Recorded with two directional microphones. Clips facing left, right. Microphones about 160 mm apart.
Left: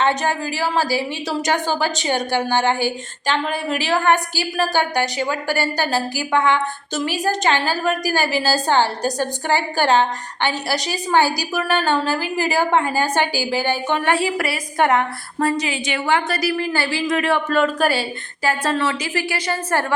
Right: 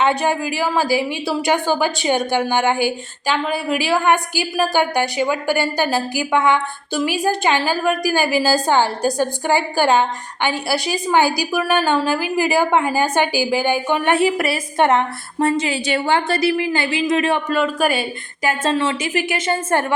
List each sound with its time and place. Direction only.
0.2 s a woman's voice: 15° right (ahead or behind)
17.5 s a woman's voice: 10° right (ahead or behind)